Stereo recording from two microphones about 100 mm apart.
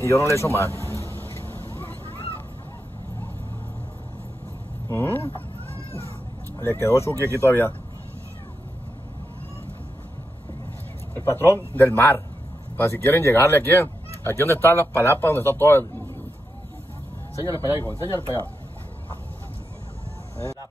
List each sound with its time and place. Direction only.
0.0 s speech: 30° left (ahead or behind)
0.7 s a sound: 30° left (ahead or behind)
4.8 s speech: 20° left (ahead or behind)
6.6 s speech: 25° left (ahead or behind)
11.1 s speech: 20° left (ahead or behind)
17.4 s speech: 30° right (ahead or behind)
17.8 s speech: 25° left (ahead or behind)